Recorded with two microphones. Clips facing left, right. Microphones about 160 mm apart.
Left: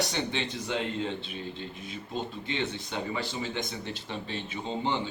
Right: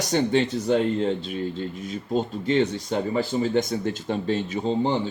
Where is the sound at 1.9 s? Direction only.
45° right (ahead or behind).